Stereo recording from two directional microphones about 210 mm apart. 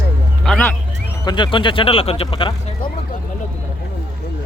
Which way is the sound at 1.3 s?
20° left (ahead or behind).